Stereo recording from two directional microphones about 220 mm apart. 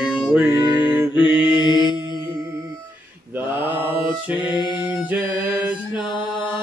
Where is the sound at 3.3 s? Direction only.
10° right (ahead or behind).